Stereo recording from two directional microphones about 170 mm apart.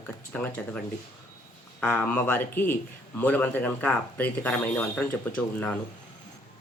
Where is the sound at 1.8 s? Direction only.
10° left (ahead or behind).